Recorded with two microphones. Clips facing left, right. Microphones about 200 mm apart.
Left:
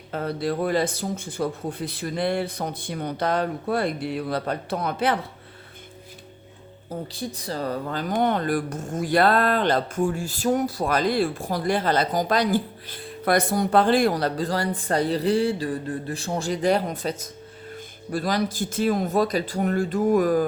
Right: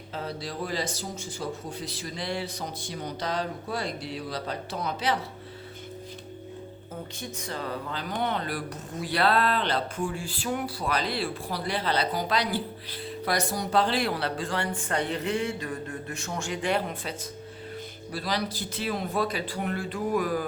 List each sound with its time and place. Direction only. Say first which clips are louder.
0.1 s speech: left 9 dB; 55° left (ahead or behind)
6.9 s speech: left 7 dB; 35° left (ahead or behind)
14.8 s a sound: left 6 dB; 35° left (ahead or behind)
18.1 s speech: left 6 dB; 50° left (ahead or behind)